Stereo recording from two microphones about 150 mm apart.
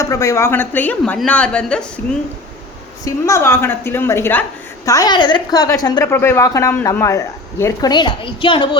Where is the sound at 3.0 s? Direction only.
20° left (ahead or behind).